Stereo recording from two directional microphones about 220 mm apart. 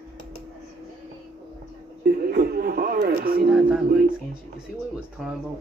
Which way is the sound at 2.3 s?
45° right (ahead or behind).